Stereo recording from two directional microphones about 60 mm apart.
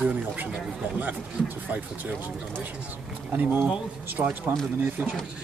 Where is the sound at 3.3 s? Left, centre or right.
Right.